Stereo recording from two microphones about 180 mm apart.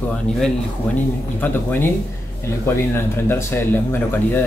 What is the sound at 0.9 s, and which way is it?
Speech, 10° left (ahead or behind).